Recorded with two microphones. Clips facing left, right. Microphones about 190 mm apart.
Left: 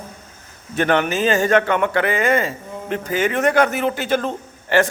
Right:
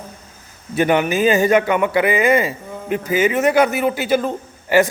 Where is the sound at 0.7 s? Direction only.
10° right (ahead or behind).